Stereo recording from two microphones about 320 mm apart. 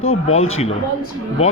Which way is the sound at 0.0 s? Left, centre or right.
Left.